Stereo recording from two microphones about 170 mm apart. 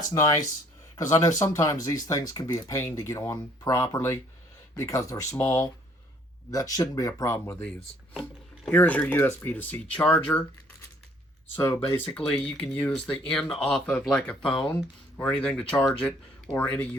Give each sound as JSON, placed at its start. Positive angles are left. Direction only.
{"t": 0.1, "sound": "speech", "side_deg": 20}
{"t": 11.5, "sound": "speech", "side_deg": 15}